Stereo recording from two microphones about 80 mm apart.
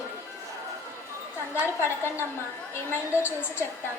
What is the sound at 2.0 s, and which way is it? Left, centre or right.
Speech, right.